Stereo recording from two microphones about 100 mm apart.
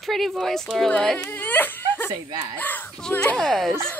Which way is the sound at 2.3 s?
40° right (ahead or behind).